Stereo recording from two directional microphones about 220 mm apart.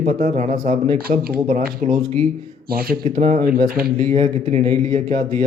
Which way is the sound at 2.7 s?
40° right (ahead or behind).